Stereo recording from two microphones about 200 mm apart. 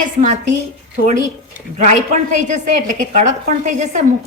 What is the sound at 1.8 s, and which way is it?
A woman's voice, 40° right (ahead or behind).